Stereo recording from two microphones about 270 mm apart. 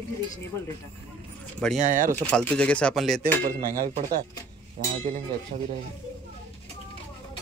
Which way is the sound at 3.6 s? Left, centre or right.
Right.